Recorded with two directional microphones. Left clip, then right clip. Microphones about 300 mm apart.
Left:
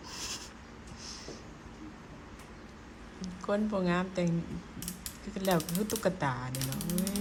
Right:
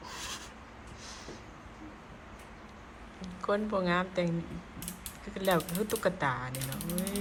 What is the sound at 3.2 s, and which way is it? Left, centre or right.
Speech, centre.